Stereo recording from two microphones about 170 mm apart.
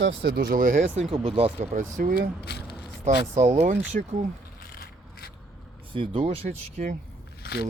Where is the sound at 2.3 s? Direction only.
75° left (ahead or behind).